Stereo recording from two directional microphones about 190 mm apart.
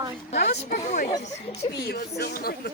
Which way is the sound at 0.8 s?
40° left (ahead or behind).